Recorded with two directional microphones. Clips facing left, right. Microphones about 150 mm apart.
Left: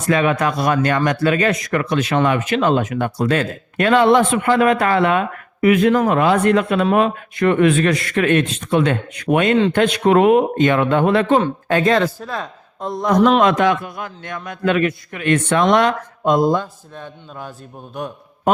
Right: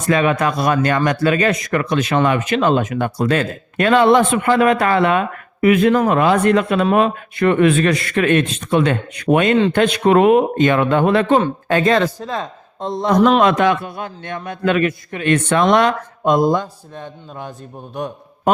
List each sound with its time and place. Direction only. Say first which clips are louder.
0.1 s speech: right 1 dB; 30° right (ahead or behind)
16.4 s a man's voice: right 1 dB; 15° right (ahead or behind)